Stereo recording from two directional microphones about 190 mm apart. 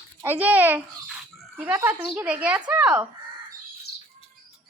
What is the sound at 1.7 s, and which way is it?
A woman's voice, 15° right (ahead or behind).